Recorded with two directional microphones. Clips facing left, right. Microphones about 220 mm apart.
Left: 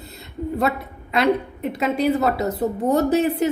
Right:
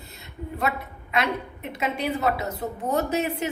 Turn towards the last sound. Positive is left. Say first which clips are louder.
# left 7 dB
turn(degrees=35)  # may be behind; listen again after turning